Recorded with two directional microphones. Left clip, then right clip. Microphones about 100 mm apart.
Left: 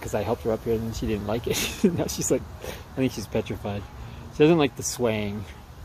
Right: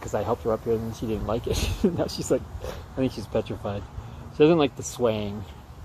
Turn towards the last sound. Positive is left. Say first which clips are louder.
# right 1 dB
turn(degrees=35)  # may be behind; listen again after turning